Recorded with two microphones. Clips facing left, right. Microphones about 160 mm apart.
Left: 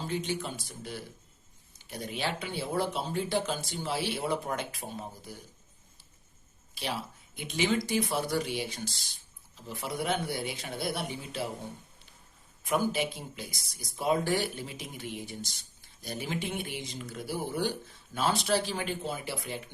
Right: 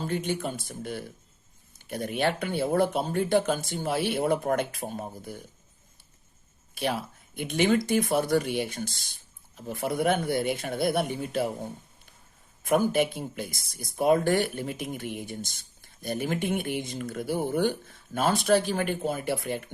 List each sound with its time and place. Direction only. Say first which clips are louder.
0.0 s speech: right 4 dB; 55° right (ahead or behind)
6.7 s speech: right 6 dB; 55° right (ahead or behind)
12.6 s speech: right 6 dB; 55° right (ahead or behind)